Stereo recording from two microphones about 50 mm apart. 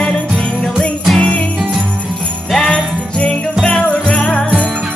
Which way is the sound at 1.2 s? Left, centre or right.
Left.